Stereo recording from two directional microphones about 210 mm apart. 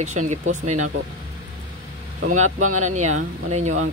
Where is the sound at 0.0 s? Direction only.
35° right (ahead or behind).